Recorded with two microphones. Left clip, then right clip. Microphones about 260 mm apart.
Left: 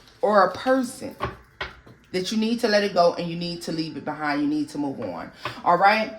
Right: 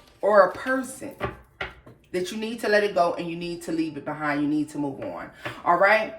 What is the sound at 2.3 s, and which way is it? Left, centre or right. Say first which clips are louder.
Speech: left 2 dB; left.